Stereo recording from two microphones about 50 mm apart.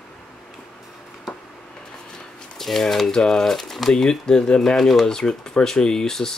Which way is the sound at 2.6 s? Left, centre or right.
Centre.